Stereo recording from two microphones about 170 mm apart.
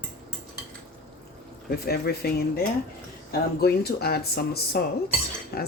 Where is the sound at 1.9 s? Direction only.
65° left (ahead or behind).